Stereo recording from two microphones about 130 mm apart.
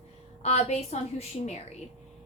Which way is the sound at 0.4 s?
55° left (ahead or behind).